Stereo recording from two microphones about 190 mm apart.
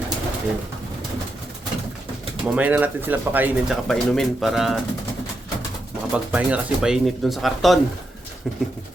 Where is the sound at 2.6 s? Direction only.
10° right (ahead or behind).